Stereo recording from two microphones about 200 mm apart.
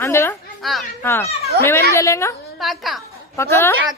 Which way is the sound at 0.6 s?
Centre (ahead or behind).